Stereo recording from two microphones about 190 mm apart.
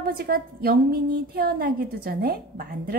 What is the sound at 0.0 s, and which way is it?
Speech, 50° right (ahead or behind).